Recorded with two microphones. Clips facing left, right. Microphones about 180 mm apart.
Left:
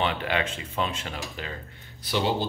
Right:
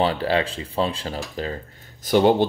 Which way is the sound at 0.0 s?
35° right (ahead or behind).